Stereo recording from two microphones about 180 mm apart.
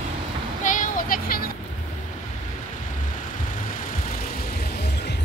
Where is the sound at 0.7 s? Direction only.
50° left (ahead or behind).